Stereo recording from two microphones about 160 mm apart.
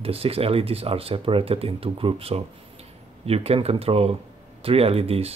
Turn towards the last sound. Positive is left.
turn(degrees=-40)  # may be behind; listen again after turning